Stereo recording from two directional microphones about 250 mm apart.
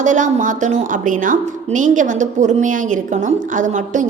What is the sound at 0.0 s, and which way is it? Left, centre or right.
A woman's voice, right.